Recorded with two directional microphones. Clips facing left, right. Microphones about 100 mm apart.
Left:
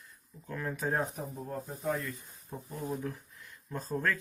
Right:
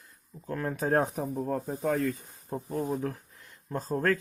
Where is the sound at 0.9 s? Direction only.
60° right (ahead or behind).